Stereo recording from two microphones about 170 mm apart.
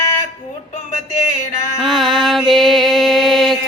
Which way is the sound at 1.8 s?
Centre (ahead or behind).